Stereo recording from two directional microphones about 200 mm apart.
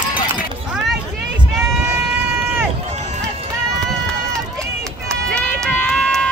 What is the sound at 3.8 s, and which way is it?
Run, centre (ahead or behind).